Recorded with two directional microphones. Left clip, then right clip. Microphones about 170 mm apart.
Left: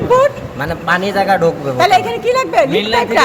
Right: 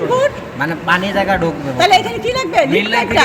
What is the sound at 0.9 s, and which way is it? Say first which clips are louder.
Speech: left 2 dB; 45° left (ahead or behind).